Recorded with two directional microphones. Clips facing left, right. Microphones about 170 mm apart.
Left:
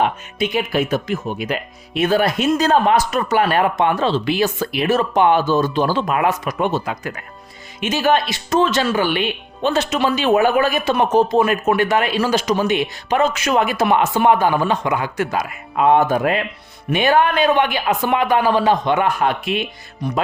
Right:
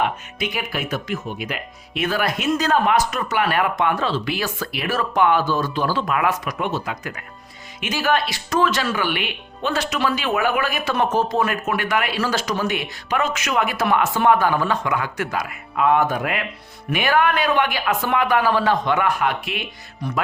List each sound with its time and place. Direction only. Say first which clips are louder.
0.3 s speech: left 11 dB; 25° left (ahead or behind)
10.9 s speech: left 4 dB; 20° left (ahead or behind)
12.2 s speech: left 5 dB; 15° left (ahead or behind)